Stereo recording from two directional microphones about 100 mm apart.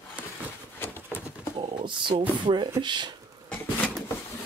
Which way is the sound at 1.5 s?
50° right (ahead or behind).